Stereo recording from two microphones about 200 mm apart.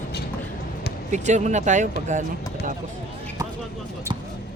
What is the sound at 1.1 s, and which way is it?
Speech, 35° right (ahead or behind).